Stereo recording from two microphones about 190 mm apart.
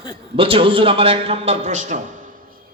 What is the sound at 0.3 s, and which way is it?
A man's voice, 30° right (ahead or behind).